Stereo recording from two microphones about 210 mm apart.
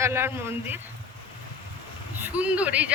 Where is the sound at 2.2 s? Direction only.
5° right (ahead or behind).